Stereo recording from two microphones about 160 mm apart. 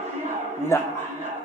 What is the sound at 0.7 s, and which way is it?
Speech, 15° left (ahead or behind).